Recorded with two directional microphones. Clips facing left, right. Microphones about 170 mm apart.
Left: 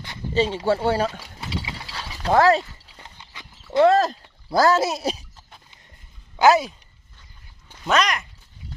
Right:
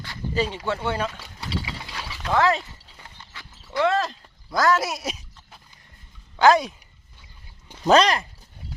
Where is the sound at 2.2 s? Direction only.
40° left (ahead or behind).